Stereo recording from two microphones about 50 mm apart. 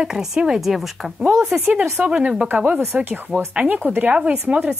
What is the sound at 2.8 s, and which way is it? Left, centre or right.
Speech, right.